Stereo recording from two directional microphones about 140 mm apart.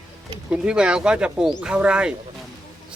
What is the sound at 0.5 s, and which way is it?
Speech, 5° right (ahead or behind).